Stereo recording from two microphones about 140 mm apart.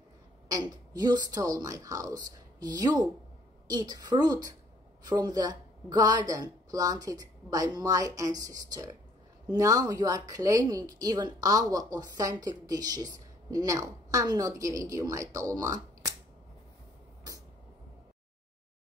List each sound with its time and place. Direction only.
0.5 s speech: 30° right (ahead or behind)